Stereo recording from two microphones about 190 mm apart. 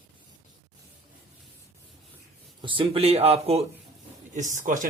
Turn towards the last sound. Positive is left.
turn(degrees=-45)  # may be behind; listen again after turning